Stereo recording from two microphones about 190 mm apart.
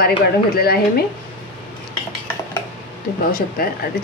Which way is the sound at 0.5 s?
55° left (ahead or behind).